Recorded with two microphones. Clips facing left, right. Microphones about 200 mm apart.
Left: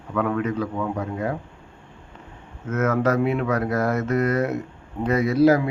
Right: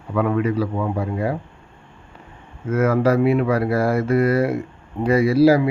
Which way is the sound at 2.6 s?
10° right (ahead or behind).